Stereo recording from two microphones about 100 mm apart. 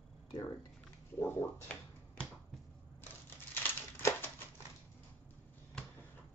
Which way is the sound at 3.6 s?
25° left (ahead or behind).